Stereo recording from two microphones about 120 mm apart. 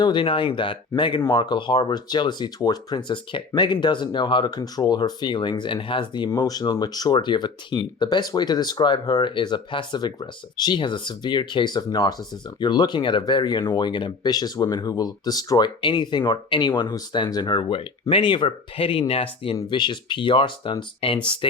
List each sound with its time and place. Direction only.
0.0 s speech: 40° left (ahead or behind)